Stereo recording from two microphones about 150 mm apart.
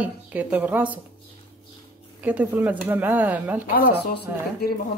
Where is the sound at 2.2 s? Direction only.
10° right (ahead or behind).